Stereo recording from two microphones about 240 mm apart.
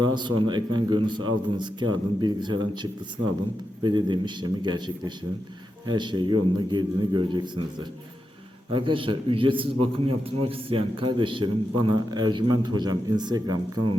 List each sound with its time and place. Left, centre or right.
0.0 s a man's voice: centre
8.7 s a man's voice: right